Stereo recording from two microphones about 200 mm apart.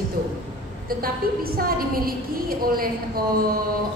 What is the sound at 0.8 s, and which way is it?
A woman's voice, 50° right (ahead or behind).